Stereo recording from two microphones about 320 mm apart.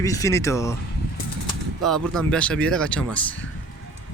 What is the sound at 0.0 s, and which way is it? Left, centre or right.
Speech, centre.